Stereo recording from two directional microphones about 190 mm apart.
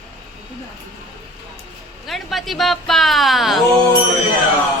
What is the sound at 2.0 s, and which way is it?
Speech, centre (ahead or behind).